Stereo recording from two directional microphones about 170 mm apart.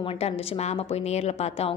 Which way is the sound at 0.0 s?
35° left (ahead or behind).